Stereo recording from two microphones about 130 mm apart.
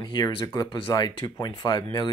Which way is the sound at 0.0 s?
35° left (ahead or behind).